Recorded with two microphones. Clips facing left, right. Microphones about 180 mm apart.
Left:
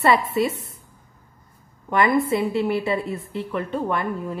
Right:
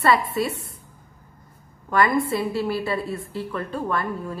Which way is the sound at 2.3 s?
20° left (ahead or behind).